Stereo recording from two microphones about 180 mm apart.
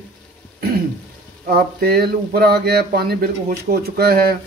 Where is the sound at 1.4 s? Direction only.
55° right (ahead or behind).